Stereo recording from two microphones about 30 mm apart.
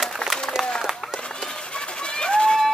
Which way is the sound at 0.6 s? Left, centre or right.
Centre.